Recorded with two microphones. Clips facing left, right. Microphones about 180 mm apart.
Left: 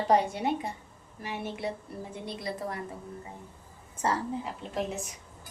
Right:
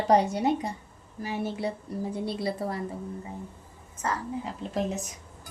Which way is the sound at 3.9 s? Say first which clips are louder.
Left 2 dB; 30° left (ahead or behind).